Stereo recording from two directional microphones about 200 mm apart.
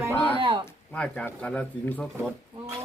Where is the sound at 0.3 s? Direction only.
25° right (ahead or behind).